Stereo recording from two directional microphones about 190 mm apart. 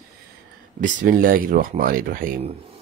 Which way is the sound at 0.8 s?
45° right (ahead or behind).